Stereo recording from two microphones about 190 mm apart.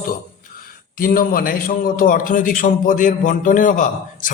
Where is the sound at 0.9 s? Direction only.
50° left (ahead or behind).